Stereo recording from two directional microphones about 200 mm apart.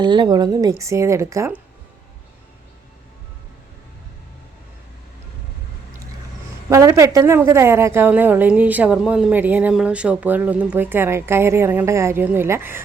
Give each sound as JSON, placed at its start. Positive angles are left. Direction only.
{"t": 0.0, "sound": "a woman's voice", "side_deg": -20}
{"t": 6.7, "sound": "a woman's voice", "side_deg": -15}